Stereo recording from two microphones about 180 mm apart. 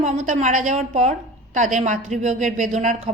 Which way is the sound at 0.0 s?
40° right (ahead or behind).